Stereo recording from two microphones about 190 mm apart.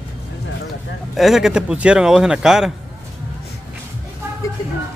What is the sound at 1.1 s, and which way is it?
Speech, centre (ahead or behind).